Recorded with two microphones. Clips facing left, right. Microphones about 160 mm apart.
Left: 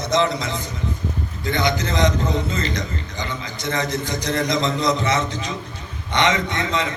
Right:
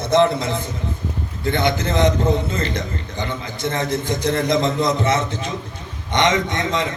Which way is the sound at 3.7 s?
55° right (ahead or behind).